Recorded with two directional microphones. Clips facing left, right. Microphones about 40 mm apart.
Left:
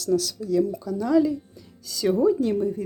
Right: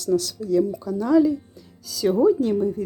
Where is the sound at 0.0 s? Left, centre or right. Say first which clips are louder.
Right 1 dB; centre.